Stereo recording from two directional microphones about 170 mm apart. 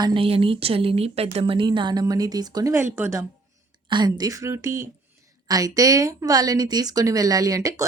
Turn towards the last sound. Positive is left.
turn(degrees=-20)  # may be behind; listen again after turning